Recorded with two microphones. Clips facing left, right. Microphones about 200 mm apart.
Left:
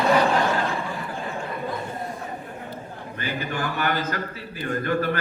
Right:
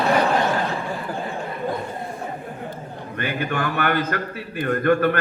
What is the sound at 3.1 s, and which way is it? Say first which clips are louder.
A man's voice: right 4 dB; 60° right (ahead or behind).